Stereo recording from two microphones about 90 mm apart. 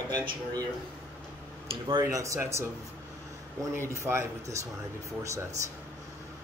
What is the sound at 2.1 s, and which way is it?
Speech, 35° right (ahead or behind).